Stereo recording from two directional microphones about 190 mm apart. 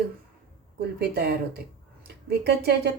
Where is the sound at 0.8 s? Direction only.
55° right (ahead or behind).